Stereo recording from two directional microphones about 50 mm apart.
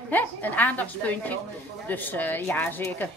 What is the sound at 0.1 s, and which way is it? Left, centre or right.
Speech, left.